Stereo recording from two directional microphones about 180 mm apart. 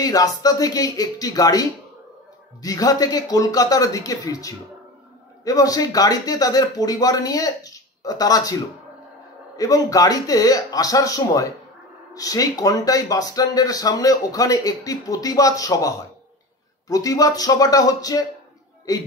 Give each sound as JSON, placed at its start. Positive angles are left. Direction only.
{"t": 0.0, "sound": "speech", "side_deg": 20}
{"t": 9.6, "sound": "speech", "side_deg": 20}